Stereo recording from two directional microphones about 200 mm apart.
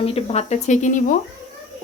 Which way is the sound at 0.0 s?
30° left (ahead or behind).